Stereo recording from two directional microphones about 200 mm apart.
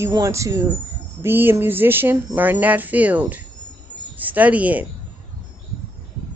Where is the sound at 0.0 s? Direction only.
15° right (ahead or behind).